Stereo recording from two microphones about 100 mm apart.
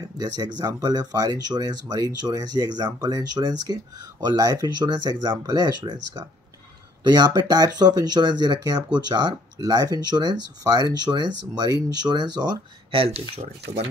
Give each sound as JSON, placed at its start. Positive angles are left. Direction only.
{"t": 0.2, "sound": "speech", "side_deg": -40}
{"t": 12.9, "sound": "speech", "side_deg": -65}